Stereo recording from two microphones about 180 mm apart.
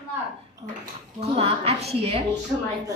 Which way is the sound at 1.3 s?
35° right (ahead or behind).